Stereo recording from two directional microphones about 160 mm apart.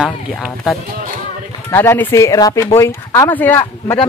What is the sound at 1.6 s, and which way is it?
Speech, 15° left (ahead or behind).